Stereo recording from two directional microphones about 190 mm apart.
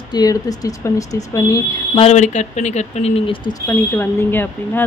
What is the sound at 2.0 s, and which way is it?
Speech, 40° left (ahead or behind).